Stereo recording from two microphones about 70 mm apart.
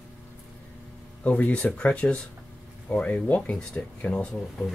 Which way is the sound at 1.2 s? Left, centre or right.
Left.